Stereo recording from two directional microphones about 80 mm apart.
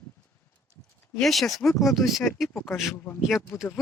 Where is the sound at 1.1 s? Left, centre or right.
Centre.